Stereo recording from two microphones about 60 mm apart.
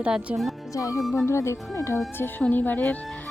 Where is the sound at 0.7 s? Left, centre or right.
Left.